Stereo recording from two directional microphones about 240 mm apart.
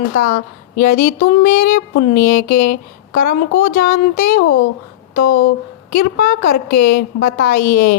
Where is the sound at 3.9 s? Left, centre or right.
Left.